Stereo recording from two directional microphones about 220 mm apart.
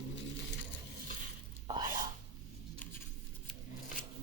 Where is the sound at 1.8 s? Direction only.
35° right (ahead or behind).